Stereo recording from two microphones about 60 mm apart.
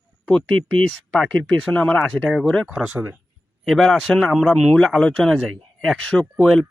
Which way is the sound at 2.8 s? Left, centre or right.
Centre.